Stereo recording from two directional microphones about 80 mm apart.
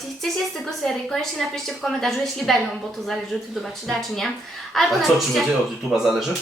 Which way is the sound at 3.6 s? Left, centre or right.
Centre.